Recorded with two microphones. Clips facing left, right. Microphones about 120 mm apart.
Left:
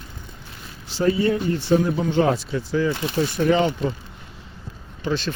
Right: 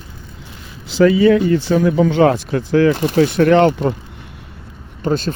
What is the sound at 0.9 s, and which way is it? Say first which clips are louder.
Speech: right 9 dB; 90° right.